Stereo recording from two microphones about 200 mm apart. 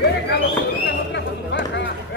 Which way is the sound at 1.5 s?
60° left (ahead or behind).